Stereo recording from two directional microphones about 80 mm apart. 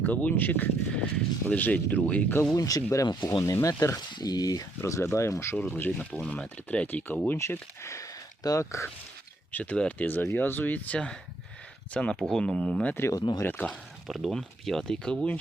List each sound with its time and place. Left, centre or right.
0.0 s speech: left
2.5 s speech: left
4.8 s speech: left
5.5 s speech: left
7.3 s speech: left
9.5 s speech: left
10.1 s speech: left
12.9 s speech: left
14.1 s speech: centre